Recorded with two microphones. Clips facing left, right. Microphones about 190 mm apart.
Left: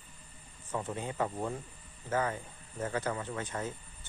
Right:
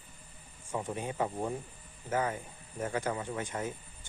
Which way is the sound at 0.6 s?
10° right (ahead or behind).